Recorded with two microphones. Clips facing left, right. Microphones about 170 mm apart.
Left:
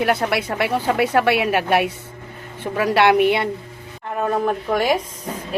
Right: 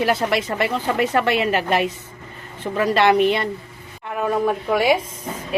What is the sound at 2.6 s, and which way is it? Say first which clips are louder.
Speech: left 1 dB; 10° left (ahead or behind).